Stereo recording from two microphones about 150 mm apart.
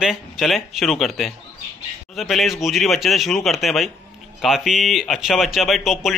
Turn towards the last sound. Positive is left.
turn(degrees=0)  # may be behind; listen again after turning